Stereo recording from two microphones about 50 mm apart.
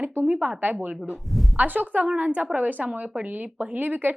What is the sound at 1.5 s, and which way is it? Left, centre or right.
A woman's voice, right.